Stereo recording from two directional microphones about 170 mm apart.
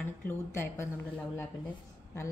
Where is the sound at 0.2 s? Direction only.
15° left (ahead or behind).